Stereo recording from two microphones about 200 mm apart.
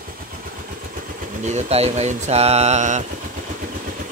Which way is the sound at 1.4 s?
35° right (ahead or behind).